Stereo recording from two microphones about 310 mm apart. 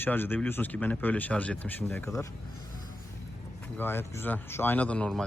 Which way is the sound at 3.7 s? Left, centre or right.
Centre.